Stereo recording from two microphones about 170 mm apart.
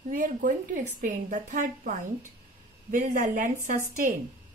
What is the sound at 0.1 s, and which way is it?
A woman's voice, 50° right (ahead or behind).